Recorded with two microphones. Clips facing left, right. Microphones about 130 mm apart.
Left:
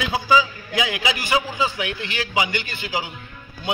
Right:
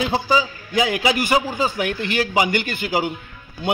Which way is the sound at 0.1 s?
40° right (ahead or behind).